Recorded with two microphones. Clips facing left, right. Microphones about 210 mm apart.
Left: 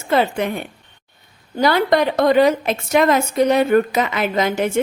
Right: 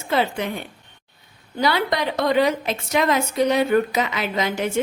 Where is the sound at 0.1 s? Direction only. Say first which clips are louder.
Left 4 dB; 50° left (ahead or behind).